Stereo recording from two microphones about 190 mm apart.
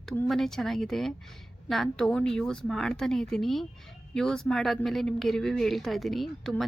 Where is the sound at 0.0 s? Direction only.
5° left (ahead or behind).